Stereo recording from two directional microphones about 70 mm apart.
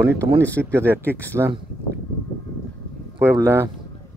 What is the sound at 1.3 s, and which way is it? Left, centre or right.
Speech, right.